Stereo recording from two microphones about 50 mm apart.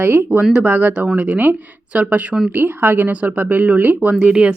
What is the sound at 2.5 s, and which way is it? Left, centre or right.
Speech, right.